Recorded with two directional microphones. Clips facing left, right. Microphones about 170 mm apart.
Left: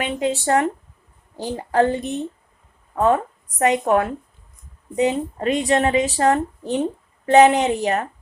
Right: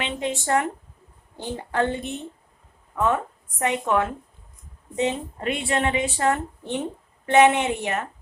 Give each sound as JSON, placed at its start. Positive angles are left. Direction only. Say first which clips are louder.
{"t": 0.0, "sound": "a woman's voice", "louder": "left 5 dB", "side_deg": 35}